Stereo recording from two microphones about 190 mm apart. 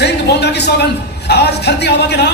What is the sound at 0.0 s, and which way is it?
A man's voice, 60° left (ahead or behind).